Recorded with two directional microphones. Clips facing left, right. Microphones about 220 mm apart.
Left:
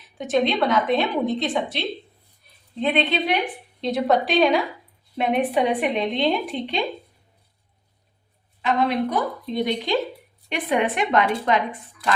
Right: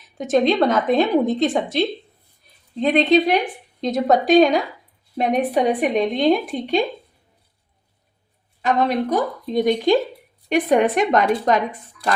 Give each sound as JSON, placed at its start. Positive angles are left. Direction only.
{"t": 0.2, "sound": "a woman's voice", "side_deg": -45}
{"t": 2.8, "sound": "a woman's voice", "side_deg": -40}
{"t": 8.6, "sound": "a woman's voice", "side_deg": -45}